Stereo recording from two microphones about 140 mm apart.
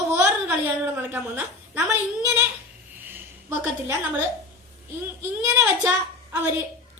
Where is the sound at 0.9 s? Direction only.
15° right (ahead or behind).